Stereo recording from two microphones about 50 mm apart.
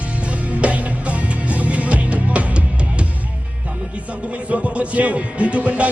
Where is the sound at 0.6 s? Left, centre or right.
Right.